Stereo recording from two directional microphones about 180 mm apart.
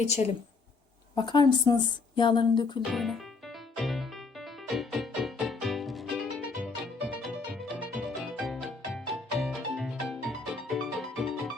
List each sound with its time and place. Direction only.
1.1 s speech: 25° left (ahead or behind)
2.9 s music: centre (ahead or behind)